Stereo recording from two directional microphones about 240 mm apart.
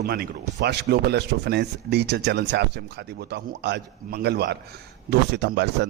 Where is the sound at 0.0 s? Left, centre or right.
Right.